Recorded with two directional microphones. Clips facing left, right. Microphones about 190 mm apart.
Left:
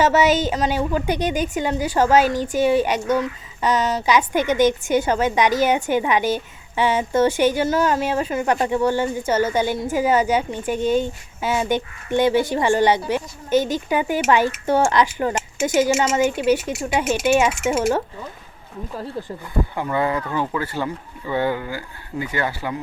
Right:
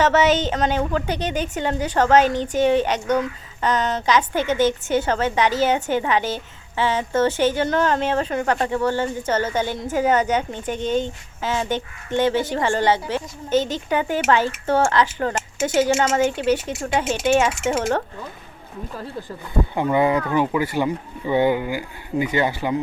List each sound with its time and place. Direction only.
0.0 s a woman's voice: 10° left (ahead or behind)
19.7 s speech: 20° right (ahead or behind)